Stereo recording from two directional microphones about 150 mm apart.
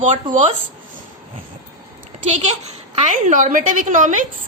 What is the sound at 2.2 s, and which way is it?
A woman's voice, 50° right (ahead or behind).